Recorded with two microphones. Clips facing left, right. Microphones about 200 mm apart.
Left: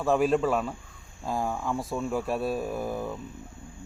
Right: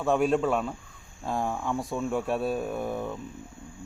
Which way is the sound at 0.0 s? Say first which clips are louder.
Even; centre (ahead or behind).